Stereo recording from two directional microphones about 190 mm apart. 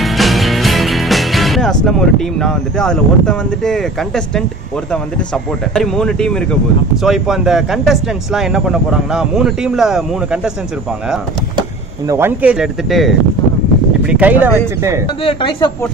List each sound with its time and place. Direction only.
0.0 s speech: centre (ahead or behind)
12.1 s speech: 10° right (ahead or behind)
15.2 s speech: 25° left (ahead or behind)